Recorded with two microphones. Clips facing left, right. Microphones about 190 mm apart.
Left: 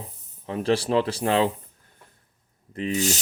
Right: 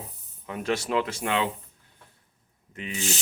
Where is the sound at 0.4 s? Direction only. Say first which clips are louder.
Left 5 dB; 30° left (ahead or behind).